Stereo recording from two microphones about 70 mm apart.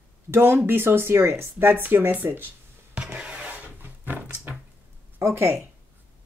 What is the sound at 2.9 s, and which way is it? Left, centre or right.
Rub, centre.